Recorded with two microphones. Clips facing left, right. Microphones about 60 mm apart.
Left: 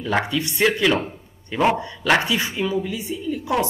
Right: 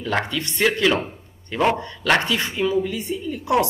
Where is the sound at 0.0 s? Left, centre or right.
Centre.